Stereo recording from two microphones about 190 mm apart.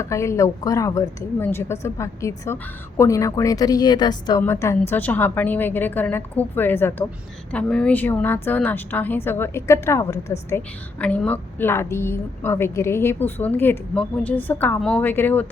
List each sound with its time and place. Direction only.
0.0 s a woman's voice: 15° left (ahead or behind)